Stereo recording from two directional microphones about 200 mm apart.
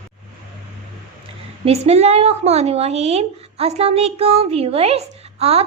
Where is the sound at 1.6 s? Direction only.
30° right (ahead or behind).